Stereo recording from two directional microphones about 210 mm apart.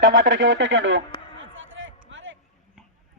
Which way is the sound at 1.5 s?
65° right (ahead or behind).